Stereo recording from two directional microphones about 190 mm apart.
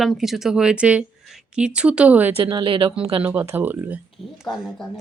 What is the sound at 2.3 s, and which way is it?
Speech, 25° right (ahead or behind).